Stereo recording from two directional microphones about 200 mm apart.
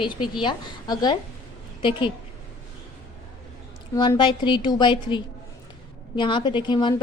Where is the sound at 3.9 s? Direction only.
20° left (ahead or behind).